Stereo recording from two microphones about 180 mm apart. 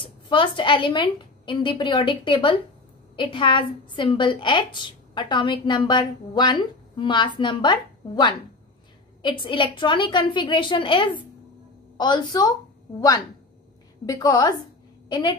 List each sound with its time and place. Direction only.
0.0 s a woman's voice: 25° left (ahead or behind)
14.0 s a woman's voice: 20° left (ahead or behind)